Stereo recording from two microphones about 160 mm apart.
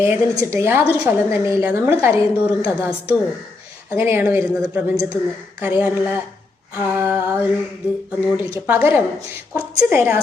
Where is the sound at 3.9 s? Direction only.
15° right (ahead or behind).